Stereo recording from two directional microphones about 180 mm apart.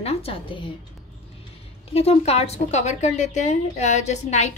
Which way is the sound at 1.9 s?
35° left (ahead or behind).